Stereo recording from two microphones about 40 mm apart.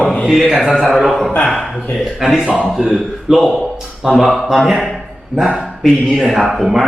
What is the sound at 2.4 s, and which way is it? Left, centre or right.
Speech, right.